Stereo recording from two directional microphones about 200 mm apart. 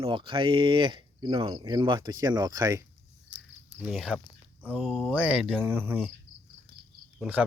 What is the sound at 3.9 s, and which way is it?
Speech, centre (ahead or behind).